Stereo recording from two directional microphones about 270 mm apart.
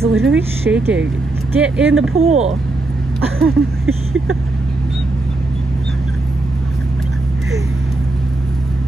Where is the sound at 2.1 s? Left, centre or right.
Right.